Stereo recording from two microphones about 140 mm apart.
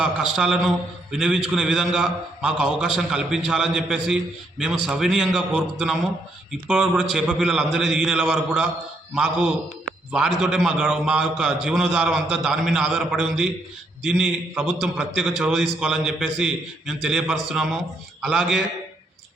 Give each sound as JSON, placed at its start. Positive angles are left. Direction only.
{"t": 0.0, "sound": "a man's voice", "side_deg": -5}